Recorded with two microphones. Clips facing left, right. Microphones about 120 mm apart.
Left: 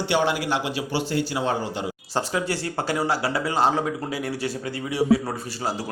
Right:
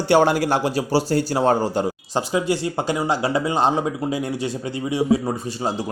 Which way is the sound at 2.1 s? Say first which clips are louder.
Right 3 dB; 15° right (ahead or behind).